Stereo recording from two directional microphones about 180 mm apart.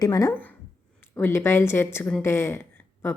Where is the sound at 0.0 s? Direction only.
20° left (ahead or behind).